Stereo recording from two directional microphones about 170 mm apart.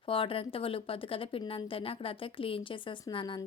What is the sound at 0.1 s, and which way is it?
Speech, 30° left (ahead or behind).